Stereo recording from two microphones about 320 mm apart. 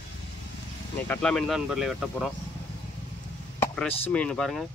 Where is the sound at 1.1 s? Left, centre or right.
Centre.